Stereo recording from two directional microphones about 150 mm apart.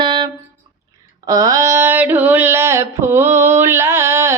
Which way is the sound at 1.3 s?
25° right (ahead or behind).